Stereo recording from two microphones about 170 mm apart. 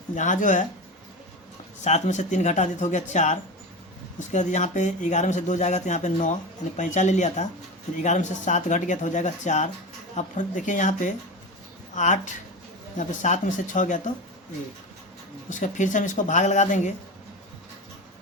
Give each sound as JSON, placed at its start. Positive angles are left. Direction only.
{"t": 0.2, "sound": "speech", "side_deg": 45}
{"t": 1.8, "sound": "speech", "side_deg": 45}
{"t": 15.4, "sound": "speech", "side_deg": 50}